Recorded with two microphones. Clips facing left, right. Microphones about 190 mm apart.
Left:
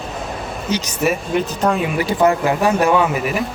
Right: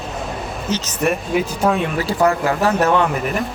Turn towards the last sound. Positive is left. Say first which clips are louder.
# left 1 dB
turn(degrees=5)  # may be behind; listen again after turning